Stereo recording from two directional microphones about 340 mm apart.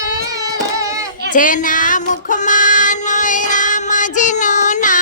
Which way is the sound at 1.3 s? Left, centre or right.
Left.